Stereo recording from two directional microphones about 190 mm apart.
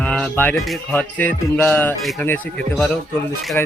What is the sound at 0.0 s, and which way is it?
Music, 10° left (ahead or behind).